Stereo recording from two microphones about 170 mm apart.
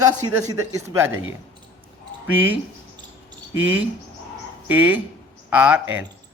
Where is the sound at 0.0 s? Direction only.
20° right (ahead or behind).